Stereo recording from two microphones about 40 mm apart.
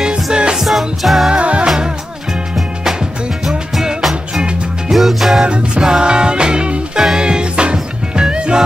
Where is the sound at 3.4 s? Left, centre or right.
Centre.